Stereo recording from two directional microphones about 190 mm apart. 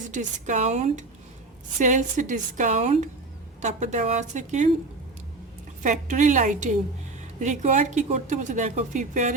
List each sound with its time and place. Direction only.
0.1 s speech: 40° right (ahead or behind)
5.8 s speech: 40° right (ahead or behind)